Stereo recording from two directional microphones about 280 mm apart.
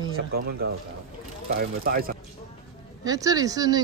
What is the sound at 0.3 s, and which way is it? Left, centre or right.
Speech, right.